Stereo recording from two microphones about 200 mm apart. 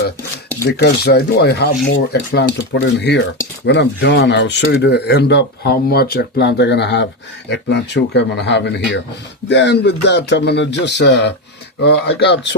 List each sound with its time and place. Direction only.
0.6 s speech: 50° left (ahead or behind)